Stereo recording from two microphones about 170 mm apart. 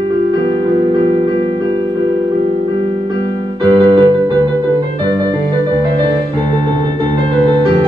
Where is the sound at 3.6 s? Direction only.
25° right (ahead or behind).